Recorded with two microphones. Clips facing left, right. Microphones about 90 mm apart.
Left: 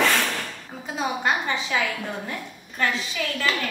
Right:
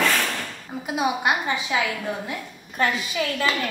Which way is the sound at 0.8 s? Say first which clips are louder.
Right 2 dB; 15° right (ahead or behind).